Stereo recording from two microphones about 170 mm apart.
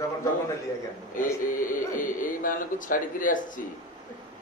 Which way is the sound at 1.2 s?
50° left (ahead or behind).